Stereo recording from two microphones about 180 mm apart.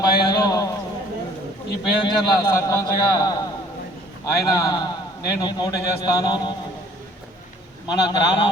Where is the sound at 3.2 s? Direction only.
20° left (ahead or behind).